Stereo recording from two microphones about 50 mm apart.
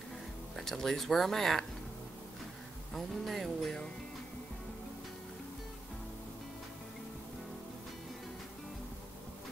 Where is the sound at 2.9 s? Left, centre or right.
Centre.